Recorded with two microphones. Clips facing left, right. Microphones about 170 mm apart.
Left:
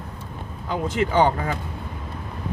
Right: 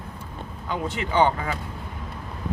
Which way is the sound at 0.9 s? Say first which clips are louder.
Left 2 dB; 40° left (ahead or behind).